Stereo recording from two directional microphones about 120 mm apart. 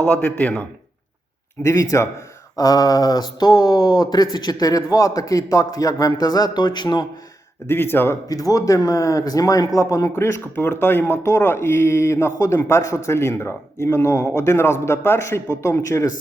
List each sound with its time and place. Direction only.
0.0 s a man's voice: 10° left (ahead or behind)
1.6 s speech: 25° left (ahead or behind)
7.7 s speech: 20° left (ahead or behind)
8.3 s speech: 30° left (ahead or behind)